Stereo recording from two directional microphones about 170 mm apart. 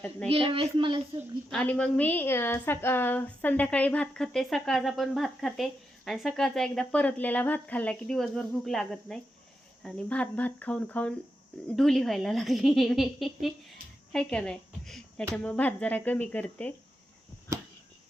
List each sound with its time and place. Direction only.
0.3 s speech: 30° right (ahead or behind)
1.5 s a woman's voice: 5° left (ahead or behind)